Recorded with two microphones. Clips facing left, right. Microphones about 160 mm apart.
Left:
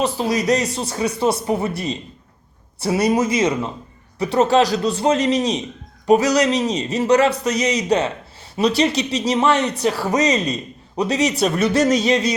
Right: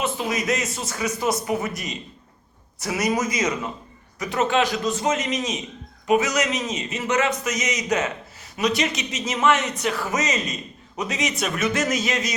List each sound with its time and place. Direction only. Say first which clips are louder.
0.0 s speech: left 6 dB; 35° left (ahead or behind)